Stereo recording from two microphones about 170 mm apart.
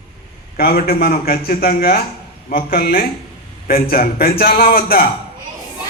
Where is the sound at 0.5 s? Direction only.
65° left (ahead or behind).